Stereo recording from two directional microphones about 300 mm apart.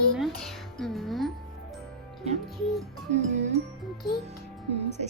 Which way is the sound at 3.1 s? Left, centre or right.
Right.